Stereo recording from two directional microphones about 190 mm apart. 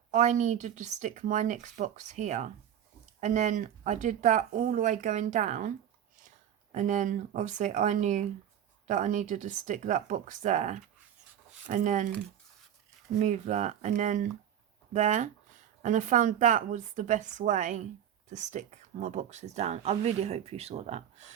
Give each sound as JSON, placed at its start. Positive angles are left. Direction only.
{"t": 0.1, "sound": "speech", "side_deg": -40}
{"t": 6.7, "sound": "speech", "side_deg": -40}
{"t": 13.1, "sound": "speech", "side_deg": -40}